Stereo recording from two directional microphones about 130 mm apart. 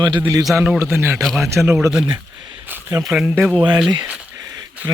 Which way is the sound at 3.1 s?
5° right (ahead or behind).